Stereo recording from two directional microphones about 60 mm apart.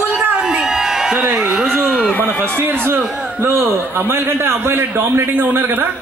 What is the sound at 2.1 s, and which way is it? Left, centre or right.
Speech, left.